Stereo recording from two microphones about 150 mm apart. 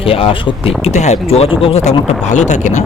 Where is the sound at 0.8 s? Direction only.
50° left (ahead or behind).